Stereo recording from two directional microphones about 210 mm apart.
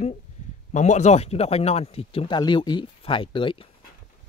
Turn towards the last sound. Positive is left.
turn(degrees=25)  # may be behind; listen again after turning